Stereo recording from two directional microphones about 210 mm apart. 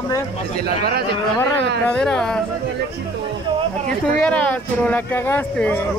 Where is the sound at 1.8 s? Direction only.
5° left (ahead or behind).